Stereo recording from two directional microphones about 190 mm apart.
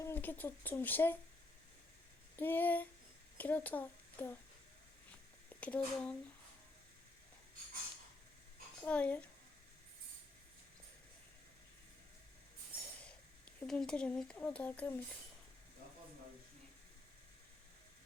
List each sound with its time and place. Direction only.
0.0 s speech: 10° left (ahead or behind)
2.3 s speech: 10° left (ahead or behind)
5.5 s speech: 5° left (ahead or behind)
8.8 s speech: 5° left (ahead or behind)
13.6 s speech: 5° left (ahead or behind)